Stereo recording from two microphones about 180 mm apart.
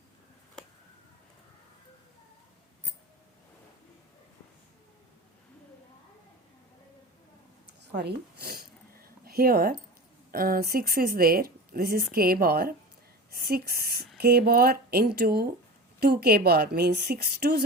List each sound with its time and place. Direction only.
7.9 s speech: 65° right (ahead or behind)